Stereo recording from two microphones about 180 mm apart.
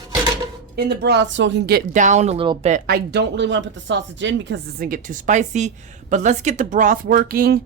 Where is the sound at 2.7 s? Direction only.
50° right (ahead or behind).